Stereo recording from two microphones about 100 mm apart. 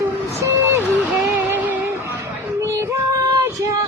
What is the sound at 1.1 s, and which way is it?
Music, centre (ahead or behind).